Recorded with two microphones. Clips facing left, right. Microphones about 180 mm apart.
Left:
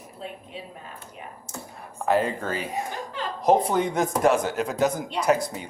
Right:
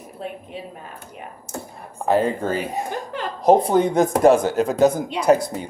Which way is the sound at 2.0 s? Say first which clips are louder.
Right 4 dB; 30° right (ahead or behind).